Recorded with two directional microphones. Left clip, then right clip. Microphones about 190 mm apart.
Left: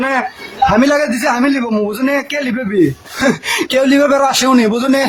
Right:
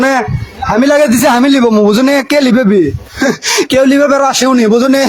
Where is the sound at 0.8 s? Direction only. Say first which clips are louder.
Right 5 dB; 30° right (ahead or behind).